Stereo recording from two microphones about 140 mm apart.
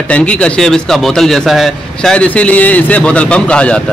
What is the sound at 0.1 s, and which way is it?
A man's voice, 10° left (ahead or behind).